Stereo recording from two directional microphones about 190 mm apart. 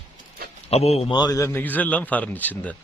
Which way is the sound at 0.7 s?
35° left (ahead or behind).